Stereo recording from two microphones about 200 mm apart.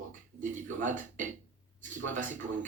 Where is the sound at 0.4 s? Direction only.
40° right (ahead or behind).